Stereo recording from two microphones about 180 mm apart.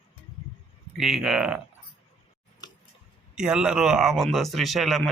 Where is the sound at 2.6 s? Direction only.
25° left (ahead or behind).